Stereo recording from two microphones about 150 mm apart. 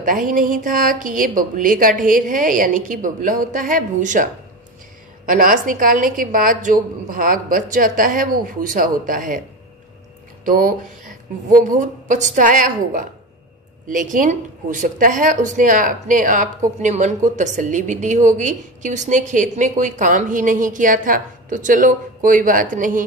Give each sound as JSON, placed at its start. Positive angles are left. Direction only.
{"t": 0.0, "sound": "speech", "side_deg": -65}
{"t": 10.4, "sound": "speech", "side_deg": -70}
{"t": 11.5, "sound": "speech", "side_deg": -55}